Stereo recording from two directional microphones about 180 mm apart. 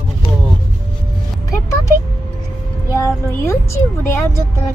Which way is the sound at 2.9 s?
15° left (ahead or behind).